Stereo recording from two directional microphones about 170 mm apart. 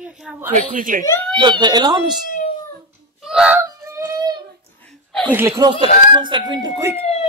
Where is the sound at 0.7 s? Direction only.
50° right (ahead or behind).